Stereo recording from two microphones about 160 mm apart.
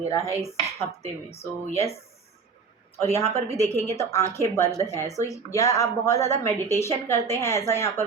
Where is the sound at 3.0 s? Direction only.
40° right (ahead or behind).